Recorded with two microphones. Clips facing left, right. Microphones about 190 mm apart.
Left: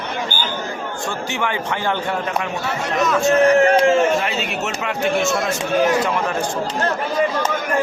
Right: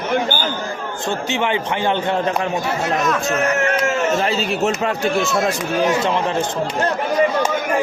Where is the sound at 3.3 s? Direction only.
30° left (ahead or behind).